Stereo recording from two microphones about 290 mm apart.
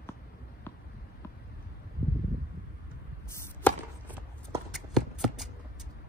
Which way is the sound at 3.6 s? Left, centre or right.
Centre.